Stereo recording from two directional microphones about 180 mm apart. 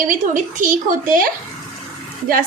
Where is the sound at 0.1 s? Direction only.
45° right (ahead or behind).